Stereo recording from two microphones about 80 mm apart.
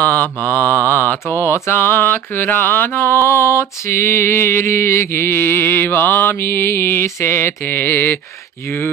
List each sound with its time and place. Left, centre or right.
0.0 s mantra: left